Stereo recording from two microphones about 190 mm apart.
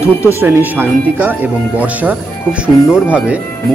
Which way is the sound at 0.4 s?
10° right (ahead or behind).